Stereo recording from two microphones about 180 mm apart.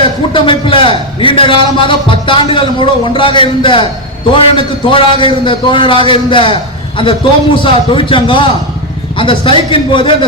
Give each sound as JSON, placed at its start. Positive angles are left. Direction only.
{"t": 0.3, "sound": "a man's voice", "side_deg": 30}